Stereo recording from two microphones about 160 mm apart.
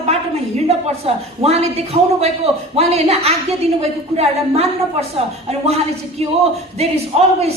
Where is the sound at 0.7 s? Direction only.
40° right (ahead or behind).